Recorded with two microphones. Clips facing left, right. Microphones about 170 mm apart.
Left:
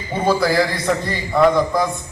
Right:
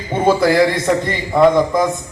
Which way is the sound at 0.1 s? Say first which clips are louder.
Right 4 dB; 20° right (ahead or behind).